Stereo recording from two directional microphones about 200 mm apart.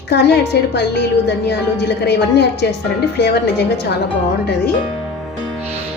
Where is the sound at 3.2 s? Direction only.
55° left (ahead or behind).